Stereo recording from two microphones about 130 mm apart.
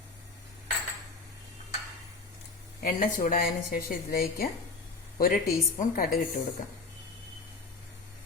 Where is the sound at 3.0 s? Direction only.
90° left.